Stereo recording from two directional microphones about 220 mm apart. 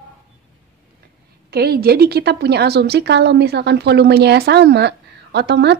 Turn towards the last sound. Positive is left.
turn(degrees=-50)  # may be behind; listen again after turning